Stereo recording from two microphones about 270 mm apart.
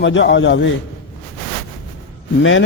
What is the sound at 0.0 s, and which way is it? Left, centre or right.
Speech, left.